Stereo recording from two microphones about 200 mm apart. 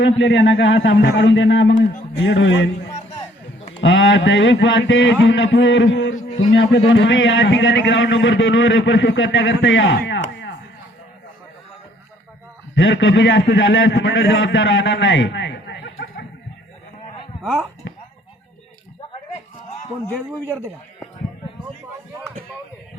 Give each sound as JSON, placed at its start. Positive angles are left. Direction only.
{"t": 0.0, "sound": "a man's voice", "side_deg": 65}
{"t": 3.8, "sound": "a man's voice", "side_deg": 75}
{"t": 12.7, "sound": "a man's voice", "side_deg": 70}
{"t": 17.4, "sound": "speech", "side_deg": 0}